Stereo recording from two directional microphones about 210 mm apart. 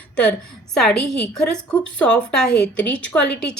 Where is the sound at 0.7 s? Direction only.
5° left (ahead or behind).